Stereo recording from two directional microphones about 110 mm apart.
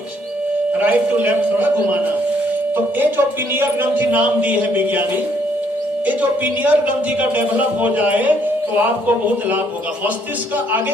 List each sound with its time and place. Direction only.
0.8 s speech: 15° right (ahead or behind)
6.1 s speech: 15° right (ahead or behind)